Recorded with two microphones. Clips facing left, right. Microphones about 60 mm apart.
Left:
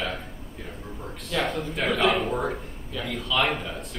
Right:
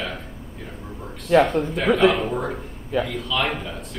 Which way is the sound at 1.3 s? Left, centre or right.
Right.